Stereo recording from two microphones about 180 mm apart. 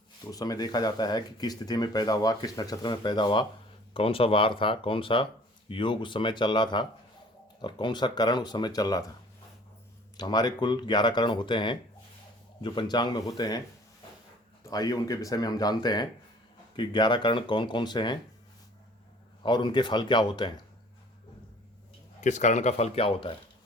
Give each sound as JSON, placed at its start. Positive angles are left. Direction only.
{"t": 0.3, "sound": "speech", "side_deg": 20}
{"t": 10.2, "sound": "speech", "side_deg": 20}
{"t": 14.6, "sound": "speech", "side_deg": 20}
{"t": 19.4, "sound": "speech", "side_deg": 25}
{"t": 22.2, "sound": "speech", "side_deg": 40}